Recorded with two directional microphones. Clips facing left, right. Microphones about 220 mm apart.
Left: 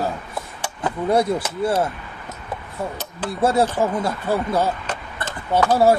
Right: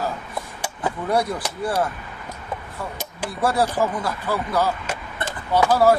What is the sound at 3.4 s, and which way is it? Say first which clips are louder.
Speech: left 3 dB; 25° left (ahead or behind).